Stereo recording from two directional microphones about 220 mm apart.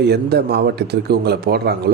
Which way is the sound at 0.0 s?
50° right (ahead or behind).